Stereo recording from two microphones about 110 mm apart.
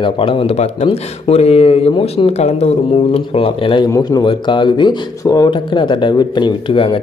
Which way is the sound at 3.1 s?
60° left (ahead or behind).